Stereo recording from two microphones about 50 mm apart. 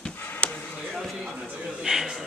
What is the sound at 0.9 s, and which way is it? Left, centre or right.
A man's voice, centre.